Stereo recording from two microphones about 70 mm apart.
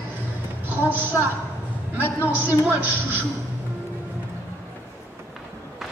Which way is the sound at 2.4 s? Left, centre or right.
Right.